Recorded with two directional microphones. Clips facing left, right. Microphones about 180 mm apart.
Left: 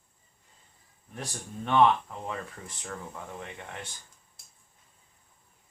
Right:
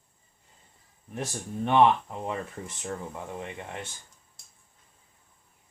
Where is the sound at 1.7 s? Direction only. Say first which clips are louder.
Right 1 dB; 20° right (ahead or behind).